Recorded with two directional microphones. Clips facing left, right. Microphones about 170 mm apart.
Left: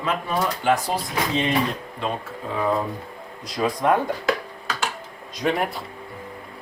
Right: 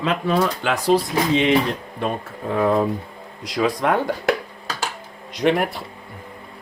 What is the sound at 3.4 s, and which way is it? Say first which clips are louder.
Speech: right 2 dB; 80° right.